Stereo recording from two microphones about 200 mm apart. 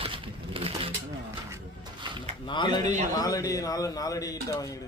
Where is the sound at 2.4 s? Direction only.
20° left (ahead or behind).